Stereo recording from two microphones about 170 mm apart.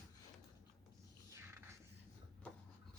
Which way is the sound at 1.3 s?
15° right (ahead or behind).